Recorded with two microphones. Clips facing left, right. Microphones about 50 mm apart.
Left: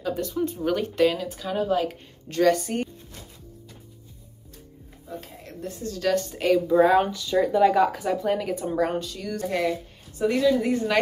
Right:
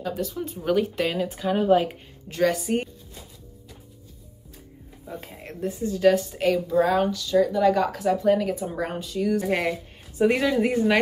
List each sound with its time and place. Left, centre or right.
0.0 s a woman's voice: centre
1.2 s speech: right
2.2 s a woman's voice: centre
5.0 s speech: right
5.7 s a woman's voice: centre
6.7 s speech: centre
7.1 s speech: left
7.7 s a woman's voice: centre
9.7 s a woman's voice: right
10.5 s speech: right